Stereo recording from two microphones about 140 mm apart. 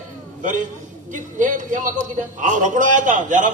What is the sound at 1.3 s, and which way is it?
Speech, 65° right (ahead or behind).